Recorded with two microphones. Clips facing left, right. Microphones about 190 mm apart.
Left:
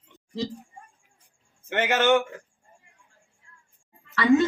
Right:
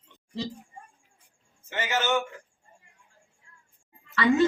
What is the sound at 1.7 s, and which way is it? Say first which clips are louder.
Speech: left 6 dB; 60° left (ahead or behind).